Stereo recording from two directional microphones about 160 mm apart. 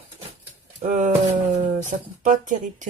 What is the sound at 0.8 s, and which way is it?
Speech, 50° right (ahead or behind).